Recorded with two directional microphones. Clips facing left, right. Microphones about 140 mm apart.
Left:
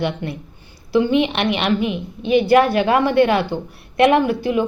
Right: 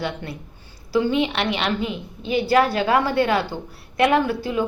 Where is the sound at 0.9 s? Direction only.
20° left (ahead or behind).